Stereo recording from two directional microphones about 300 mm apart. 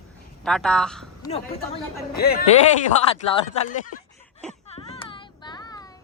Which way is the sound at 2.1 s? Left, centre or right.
Left.